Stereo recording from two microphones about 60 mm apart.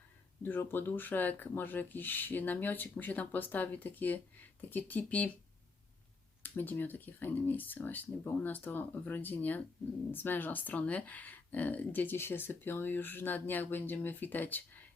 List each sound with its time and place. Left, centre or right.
0.4 s speech: left
6.4 s speech: left